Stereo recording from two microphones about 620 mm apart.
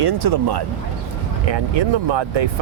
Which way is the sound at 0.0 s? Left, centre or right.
Right.